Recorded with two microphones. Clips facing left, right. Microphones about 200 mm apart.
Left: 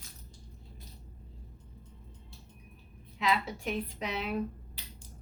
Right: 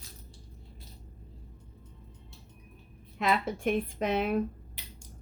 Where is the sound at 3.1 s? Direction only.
50° right (ahead or behind).